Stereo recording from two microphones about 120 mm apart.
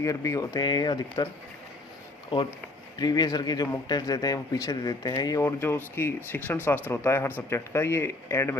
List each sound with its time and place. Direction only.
0.0 s speech: 25° left (ahead or behind)
2.3 s speech: 35° left (ahead or behind)